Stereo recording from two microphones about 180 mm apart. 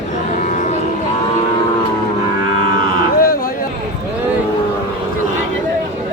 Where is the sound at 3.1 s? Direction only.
55° left (ahead or behind).